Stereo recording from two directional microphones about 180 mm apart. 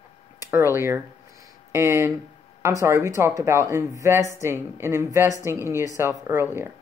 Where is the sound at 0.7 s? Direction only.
15° right (ahead or behind).